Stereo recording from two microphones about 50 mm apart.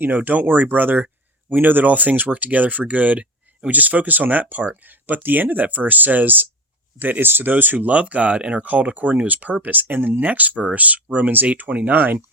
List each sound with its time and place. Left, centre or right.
0.0 s speech: right